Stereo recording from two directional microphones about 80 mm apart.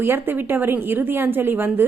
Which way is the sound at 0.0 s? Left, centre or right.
Right.